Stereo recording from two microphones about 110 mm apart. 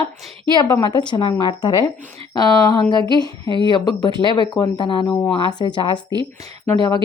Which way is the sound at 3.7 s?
40° left (ahead or behind).